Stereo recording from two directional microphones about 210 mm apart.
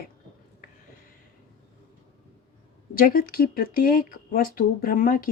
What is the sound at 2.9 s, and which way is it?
A woman's voice, 45° left (ahead or behind).